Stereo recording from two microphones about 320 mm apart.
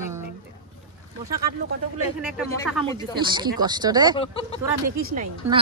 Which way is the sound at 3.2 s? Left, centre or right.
Centre.